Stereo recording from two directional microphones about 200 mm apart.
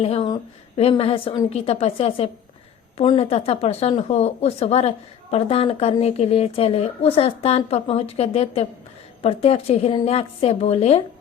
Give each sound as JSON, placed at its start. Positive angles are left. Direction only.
{"t": 0.0, "sound": "a woman's voice", "side_deg": 30}